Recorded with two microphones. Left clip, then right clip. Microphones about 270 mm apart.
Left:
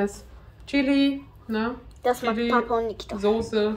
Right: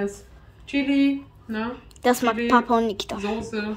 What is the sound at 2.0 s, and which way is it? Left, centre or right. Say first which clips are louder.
A woman's voice: right 3 dB; right.